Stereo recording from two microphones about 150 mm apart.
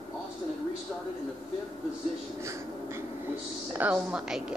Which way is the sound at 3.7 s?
5° right (ahead or behind).